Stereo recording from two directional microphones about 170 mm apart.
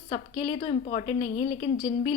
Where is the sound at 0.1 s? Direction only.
35° left (ahead or behind).